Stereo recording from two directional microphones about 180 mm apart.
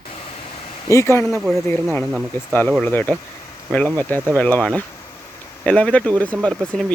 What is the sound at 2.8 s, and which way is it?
Speech, 10° left (ahead or behind).